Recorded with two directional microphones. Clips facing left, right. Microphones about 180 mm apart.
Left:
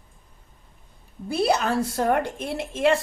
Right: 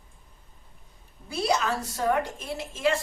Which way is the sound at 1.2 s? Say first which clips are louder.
Left 4 dB; 60° left (ahead or behind).